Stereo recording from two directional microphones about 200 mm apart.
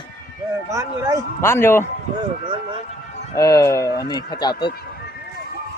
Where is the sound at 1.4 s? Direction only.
10° left (ahead or behind).